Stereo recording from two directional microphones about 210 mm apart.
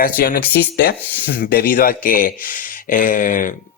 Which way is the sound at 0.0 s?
50° left (ahead or behind).